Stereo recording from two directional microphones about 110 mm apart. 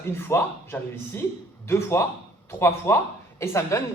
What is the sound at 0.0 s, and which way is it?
Speech, 20° left (ahead or behind).